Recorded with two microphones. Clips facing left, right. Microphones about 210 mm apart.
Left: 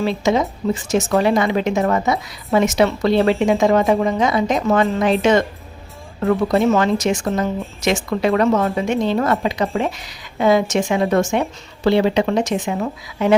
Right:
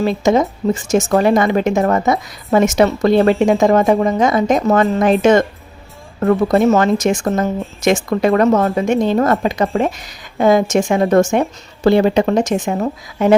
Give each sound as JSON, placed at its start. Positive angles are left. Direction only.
{"t": 0.0, "sound": "speech", "side_deg": -45}